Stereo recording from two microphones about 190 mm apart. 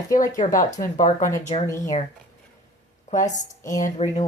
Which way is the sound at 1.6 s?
15° left (ahead or behind).